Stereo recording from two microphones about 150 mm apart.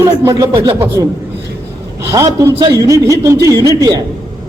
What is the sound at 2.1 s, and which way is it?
A man's voice, 20° right (ahead or behind).